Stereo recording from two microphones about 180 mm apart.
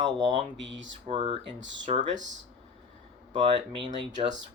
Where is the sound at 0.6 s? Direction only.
90° right.